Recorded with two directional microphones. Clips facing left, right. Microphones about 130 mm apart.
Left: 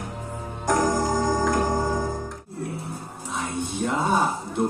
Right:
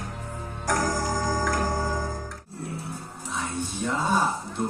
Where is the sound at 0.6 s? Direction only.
20° left (ahead or behind).